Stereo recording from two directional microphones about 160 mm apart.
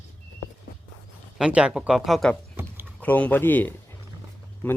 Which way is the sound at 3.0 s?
10° left (ahead or behind).